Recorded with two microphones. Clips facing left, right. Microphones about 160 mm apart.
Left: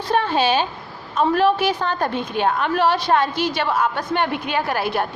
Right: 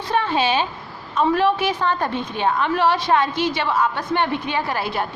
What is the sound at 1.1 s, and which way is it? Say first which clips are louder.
A woman's voice: left 1 dB; 40° left (ahead or behind).